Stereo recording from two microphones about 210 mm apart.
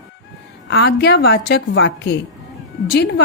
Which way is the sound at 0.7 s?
50° left (ahead or behind).